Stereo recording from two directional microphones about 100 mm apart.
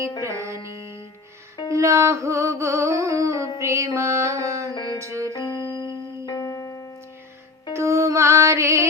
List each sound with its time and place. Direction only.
0.2 s music: 30° right (ahead or behind)
4.7 s music: 50° left (ahead or behind)
4.9 s music: 30° right (ahead or behind)
5.7 s music: 55° left (ahead or behind)
6.2 s music: 30° left (ahead or behind)
7.7 s music: 30° right (ahead or behind)